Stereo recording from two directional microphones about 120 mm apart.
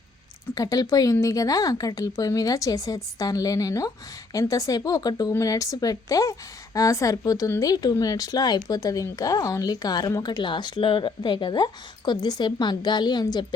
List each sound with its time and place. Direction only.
0.5 s speech: 30° left (ahead or behind)